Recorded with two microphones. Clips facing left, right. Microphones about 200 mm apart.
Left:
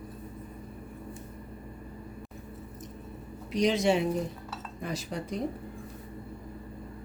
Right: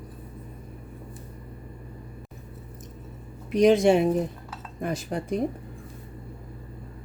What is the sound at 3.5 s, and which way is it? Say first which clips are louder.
Speech: right 7 dB; 55° right (ahead or behind).